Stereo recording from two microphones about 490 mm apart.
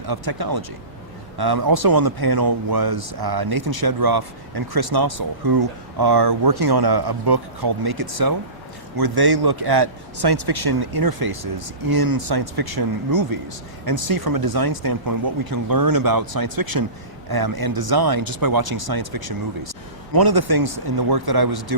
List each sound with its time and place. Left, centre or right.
0.1 s speech: right